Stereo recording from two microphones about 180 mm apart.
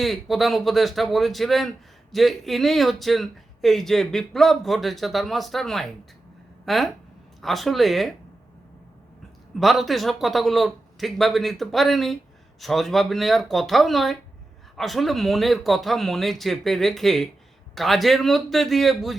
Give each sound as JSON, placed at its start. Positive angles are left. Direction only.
{"t": 0.0, "sound": "speech", "side_deg": 0}
{"t": 9.6, "sound": "speech", "side_deg": 0}